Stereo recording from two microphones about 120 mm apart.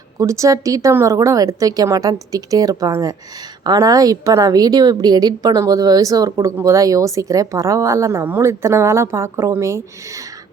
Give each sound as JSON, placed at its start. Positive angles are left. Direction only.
{"t": 0.2, "sound": "a woman's voice", "side_deg": -25}